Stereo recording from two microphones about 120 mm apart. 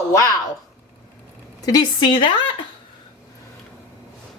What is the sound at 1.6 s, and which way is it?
A woman's voice, 30° left (ahead or behind).